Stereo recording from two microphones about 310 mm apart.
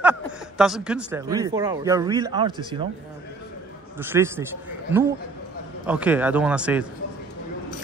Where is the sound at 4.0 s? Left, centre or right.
Centre.